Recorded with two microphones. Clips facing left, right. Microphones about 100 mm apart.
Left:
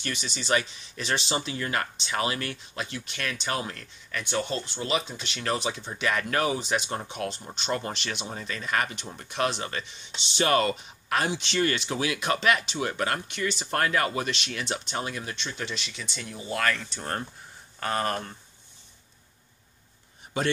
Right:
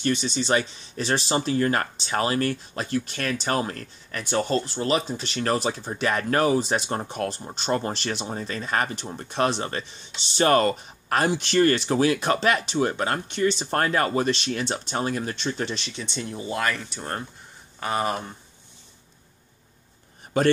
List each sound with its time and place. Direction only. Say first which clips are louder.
0.0 s speech: right 10 dB; 35° right (ahead or behind)
16.7 s speech: right 1 dB; 5° right (ahead or behind)